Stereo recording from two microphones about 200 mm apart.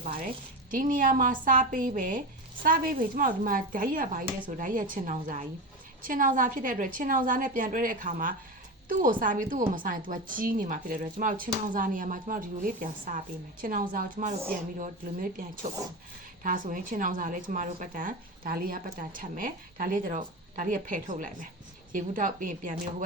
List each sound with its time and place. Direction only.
0.0 s a woman's voice: 45° right (ahead or behind)